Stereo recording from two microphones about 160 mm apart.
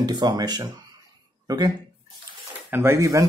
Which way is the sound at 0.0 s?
25° right (ahead or behind).